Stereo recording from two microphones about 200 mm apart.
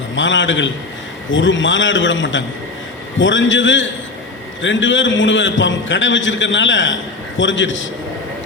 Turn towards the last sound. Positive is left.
turn(degrees=70)  # may be behind; listen again after turning